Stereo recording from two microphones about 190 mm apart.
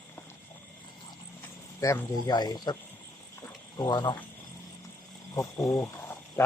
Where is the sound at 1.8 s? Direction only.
15° left (ahead or behind).